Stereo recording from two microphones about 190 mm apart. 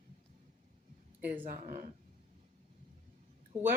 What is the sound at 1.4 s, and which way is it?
Speech, 40° right (ahead or behind).